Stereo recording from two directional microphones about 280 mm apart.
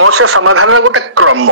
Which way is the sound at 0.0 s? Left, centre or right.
Right.